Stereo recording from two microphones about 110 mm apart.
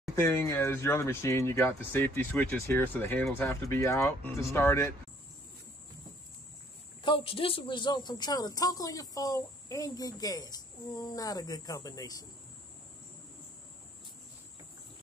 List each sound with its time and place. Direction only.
0.1 s speech: 25° left (ahead or behind)
7.0 s a woman's voice: 50° left (ahead or behind); by 12.3 s 35° left (ahead or behind)